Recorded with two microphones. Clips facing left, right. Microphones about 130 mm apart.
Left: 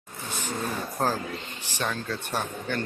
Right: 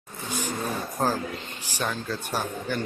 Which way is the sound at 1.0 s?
Centre (ahead or behind).